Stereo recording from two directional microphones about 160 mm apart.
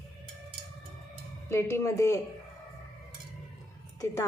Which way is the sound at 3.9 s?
20° left (ahead or behind).